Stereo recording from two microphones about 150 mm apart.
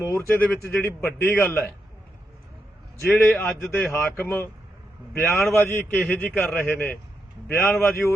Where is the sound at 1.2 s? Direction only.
15° left (ahead or behind).